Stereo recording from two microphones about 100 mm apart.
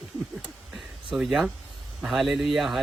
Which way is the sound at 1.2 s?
5° right (ahead or behind).